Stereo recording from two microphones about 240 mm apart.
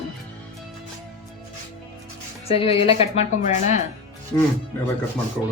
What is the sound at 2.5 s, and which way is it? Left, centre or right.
A woman's voice, left.